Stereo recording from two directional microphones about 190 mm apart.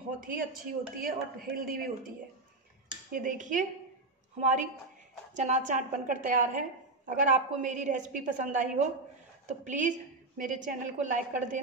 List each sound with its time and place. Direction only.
0.2 s speech: 45° right (ahead or behind)
3.1 s a woman's voice: 45° right (ahead or behind)